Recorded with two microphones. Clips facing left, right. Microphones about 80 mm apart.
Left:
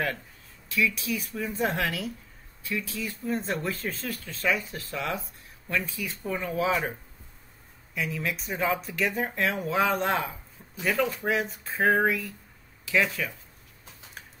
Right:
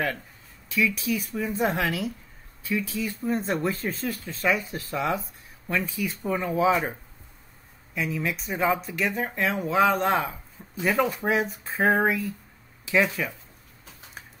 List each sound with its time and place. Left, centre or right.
0.7 s speech: centre
7.9 s speech: centre
10.8 s speech: centre